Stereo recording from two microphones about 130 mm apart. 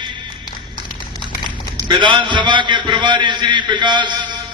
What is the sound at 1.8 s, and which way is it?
A man's voice, 35° right (ahead or behind).